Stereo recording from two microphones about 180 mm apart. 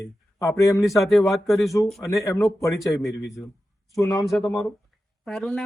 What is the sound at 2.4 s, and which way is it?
Speech, 15° left (ahead or behind).